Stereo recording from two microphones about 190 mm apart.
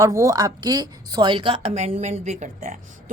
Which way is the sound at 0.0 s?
15° right (ahead or behind).